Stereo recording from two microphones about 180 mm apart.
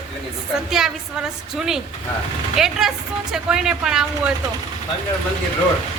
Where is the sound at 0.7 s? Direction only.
5° right (ahead or behind).